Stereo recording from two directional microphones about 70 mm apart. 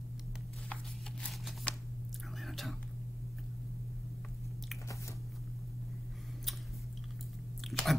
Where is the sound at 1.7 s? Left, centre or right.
Centre.